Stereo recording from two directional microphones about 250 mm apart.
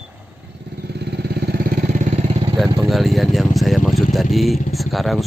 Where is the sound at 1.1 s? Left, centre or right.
Right.